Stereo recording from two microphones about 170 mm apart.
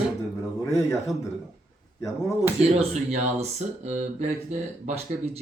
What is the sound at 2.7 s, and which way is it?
Speech, 40° right (ahead or behind).